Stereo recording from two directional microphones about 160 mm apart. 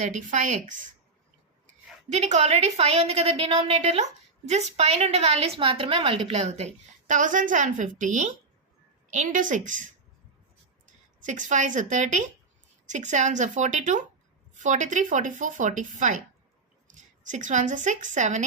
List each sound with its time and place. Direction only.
0.0 s a woman's voice: 50° right (ahead or behind)
2.0 s a woman's voice: 45° right (ahead or behind)
11.2 s a woman's voice: 50° right (ahead or behind)